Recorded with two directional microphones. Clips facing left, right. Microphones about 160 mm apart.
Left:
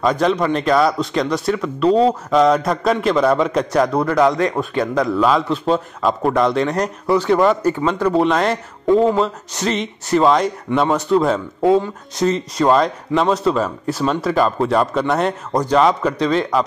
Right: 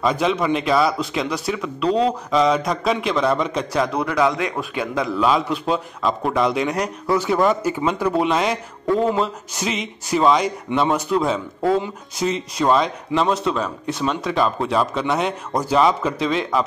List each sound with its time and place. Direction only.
0.0 s speech: 5° right (ahead or behind)
3.4 s a man's voice: 40° left (ahead or behind)
5.2 s a man's voice: 5° right (ahead or behind)
8.8 s a sound: 30° left (ahead or behind)
9.2 s speech: centre (ahead or behind)